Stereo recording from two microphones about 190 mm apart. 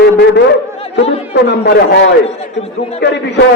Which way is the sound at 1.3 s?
65° left (ahead or behind).